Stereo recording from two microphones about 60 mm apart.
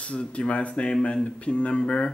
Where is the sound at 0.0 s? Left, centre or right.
Centre.